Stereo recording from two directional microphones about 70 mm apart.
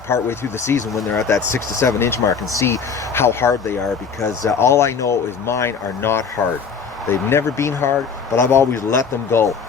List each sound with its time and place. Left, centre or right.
0.1 s speech: left
0.9 s speech: centre
1.3 s speech: left